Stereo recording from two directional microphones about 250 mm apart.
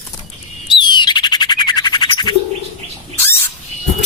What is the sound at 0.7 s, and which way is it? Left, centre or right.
Bird, centre.